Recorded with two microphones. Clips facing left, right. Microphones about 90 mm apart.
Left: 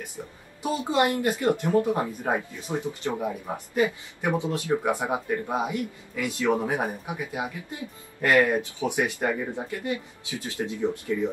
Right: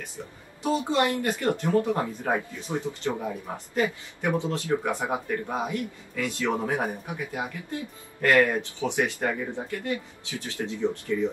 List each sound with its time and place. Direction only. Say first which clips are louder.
0.0 s speech: left 1 dB; 15° left (ahead or behind)